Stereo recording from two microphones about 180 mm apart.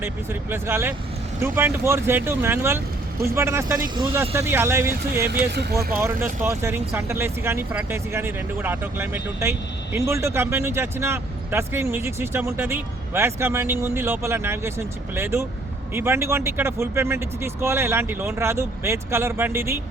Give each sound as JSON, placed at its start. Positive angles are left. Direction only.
{"t": 0.0, "sound": "speech", "side_deg": -15}
{"t": 5.5, "sound": "speech", "side_deg": -65}
{"t": 6.4, "sound": "speech", "side_deg": -15}